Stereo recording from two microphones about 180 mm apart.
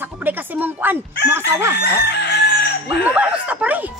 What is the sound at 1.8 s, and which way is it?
Chicken, 70° left (ahead or behind).